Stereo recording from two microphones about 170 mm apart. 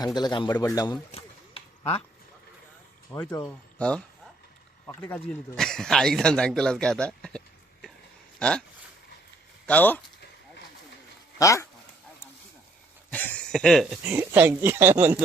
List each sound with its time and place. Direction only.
0.0 s speech: 25° left (ahead or behind)
0.5 s speech: 15° left (ahead or behind)
0.9 s a sound: 35° left (ahead or behind)
3.1 s speech: 10° left (ahead or behind)
9.6 s speech: 10° left (ahead or behind)
11.3 s speech: 20° left (ahead or behind)
13.1 s speech: 10° left (ahead or behind); by 15.2 s 15° right (ahead or behind)